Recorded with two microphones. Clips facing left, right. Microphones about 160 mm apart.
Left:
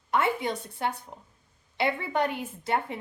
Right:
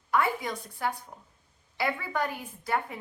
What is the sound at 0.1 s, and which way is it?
A woman's voice, 25° left (ahead or behind).